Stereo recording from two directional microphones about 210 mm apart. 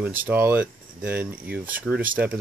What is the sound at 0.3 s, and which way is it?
Speech, 10° right (ahead or behind).